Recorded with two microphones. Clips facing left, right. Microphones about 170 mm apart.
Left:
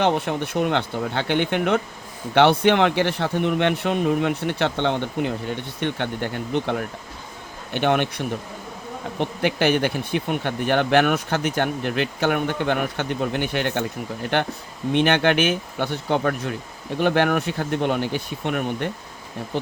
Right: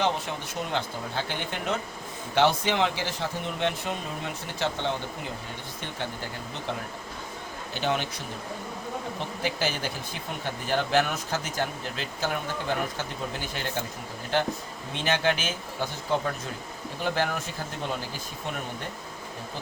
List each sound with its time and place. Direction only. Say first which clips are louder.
0.0 s speech: left 7 dB; 60° left (ahead or behind)
9.1 s speech: left 12 dB; 65° left (ahead or behind)